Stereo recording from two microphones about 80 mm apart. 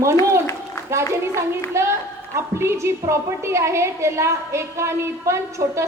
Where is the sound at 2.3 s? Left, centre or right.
Right.